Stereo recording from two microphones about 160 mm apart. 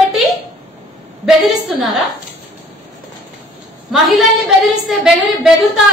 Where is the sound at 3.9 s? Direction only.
Centre (ahead or behind).